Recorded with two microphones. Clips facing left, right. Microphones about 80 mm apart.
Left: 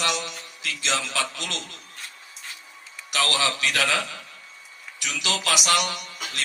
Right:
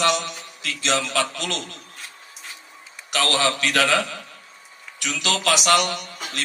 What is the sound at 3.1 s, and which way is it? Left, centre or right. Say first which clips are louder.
A man's voice: right 3 dB; right.